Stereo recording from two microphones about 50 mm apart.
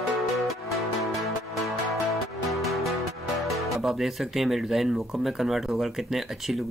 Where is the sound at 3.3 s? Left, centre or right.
Centre.